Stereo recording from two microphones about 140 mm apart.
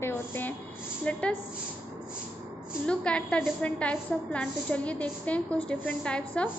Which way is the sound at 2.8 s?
10° left (ahead or behind).